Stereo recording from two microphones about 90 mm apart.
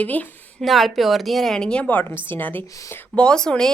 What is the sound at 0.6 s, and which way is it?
A woman's voice, centre (ahead or behind).